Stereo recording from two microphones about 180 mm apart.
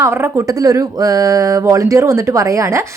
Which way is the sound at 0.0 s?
15° right (ahead or behind).